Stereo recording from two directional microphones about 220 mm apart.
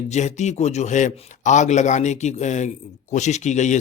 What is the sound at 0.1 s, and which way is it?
Speech, 30° left (ahead or behind).